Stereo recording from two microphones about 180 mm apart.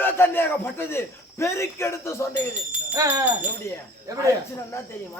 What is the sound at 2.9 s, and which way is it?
Speech, 20° right (ahead or behind).